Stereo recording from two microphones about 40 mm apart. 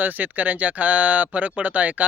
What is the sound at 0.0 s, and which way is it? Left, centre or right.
Speech, right.